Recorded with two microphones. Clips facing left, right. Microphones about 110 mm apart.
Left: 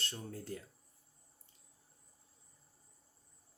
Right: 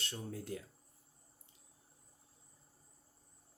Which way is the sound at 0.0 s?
10° right (ahead or behind).